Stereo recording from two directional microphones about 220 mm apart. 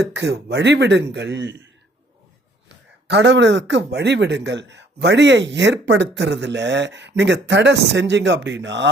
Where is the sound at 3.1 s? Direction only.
50° right (ahead or behind).